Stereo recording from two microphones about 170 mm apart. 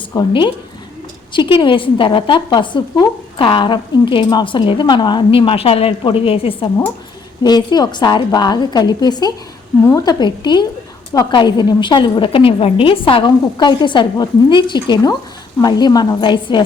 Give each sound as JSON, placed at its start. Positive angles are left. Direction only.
{"t": 0.1, "sound": "a woman's voice", "side_deg": 25}